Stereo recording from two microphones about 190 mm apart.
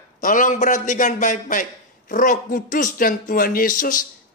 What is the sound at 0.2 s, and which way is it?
A man's voice, 45° left (ahead or behind).